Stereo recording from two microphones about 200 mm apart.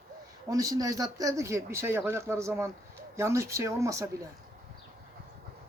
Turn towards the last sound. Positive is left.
turn(degrees=-15)  # may be behind; listen again after turning